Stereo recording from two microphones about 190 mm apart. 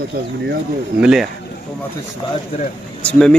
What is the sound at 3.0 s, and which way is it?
Speech, 5° left (ahead or behind).